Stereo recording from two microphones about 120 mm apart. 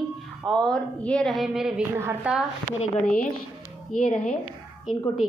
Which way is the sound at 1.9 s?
20° right (ahead or behind).